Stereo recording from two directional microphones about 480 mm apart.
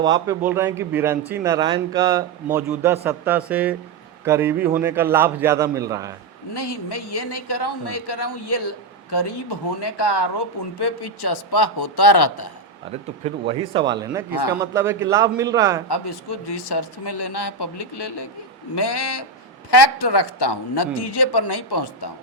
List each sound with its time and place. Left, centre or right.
0.0 s speech: centre
6.5 s speech: left
9.8 s a man's voice: left
13.2 s a man's voice: centre
15.9 s speech: left